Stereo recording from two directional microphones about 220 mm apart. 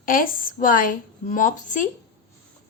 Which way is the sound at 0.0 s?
40° left (ahead or behind).